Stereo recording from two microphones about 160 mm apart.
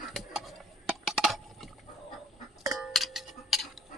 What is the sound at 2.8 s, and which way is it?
Music, centre (ahead or behind).